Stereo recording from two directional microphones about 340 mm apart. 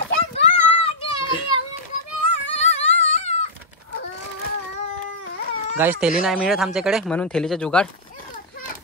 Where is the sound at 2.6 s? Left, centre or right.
Centre.